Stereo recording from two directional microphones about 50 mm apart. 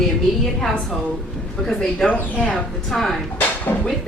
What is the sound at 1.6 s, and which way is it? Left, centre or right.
A woman's voice, centre.